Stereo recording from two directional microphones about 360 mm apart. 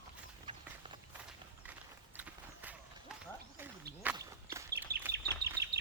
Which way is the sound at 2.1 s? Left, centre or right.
Centre.